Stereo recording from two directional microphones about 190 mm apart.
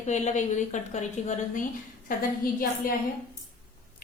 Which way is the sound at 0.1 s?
40° left (ahead or behind).